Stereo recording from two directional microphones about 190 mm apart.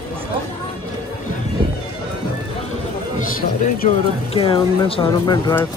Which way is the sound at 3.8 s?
35° left (ahead or behind).